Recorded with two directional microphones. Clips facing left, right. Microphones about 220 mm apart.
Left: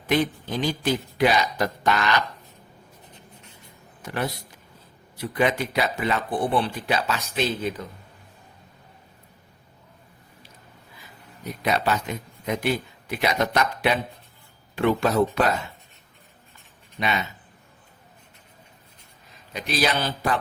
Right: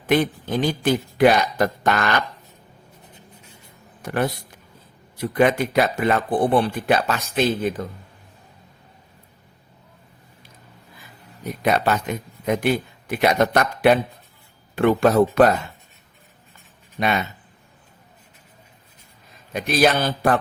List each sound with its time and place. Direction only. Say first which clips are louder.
0.1 s speech: right 4 dB; 50° right (ahead or behind)
4.0 s a man's voice: right 5 dB; 50° right (ahead or behind)
11.4 s speech: right 4 dB; 50° right (ahead or behind)
17.0 s speech: right 4 dB; 50° right (ahead or behind)
19.5 s speech: right 6 dB; 50° right (ahead or behind)